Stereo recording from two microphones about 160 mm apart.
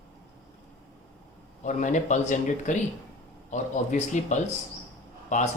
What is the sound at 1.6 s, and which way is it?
A man's voice, 50° left (ahead or behind).